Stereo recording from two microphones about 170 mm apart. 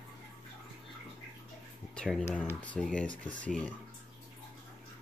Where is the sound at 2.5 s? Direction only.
5° left (ahead or behind).